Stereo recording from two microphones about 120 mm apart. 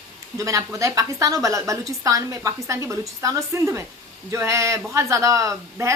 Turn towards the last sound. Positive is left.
turn(degrees=-25)  # may be behind; listen again after turning